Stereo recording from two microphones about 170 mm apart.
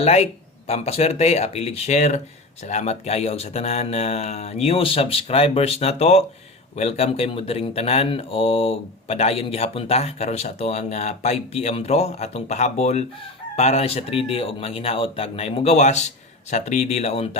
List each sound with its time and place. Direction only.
0.0 s speech: 35° left (ahead or behind)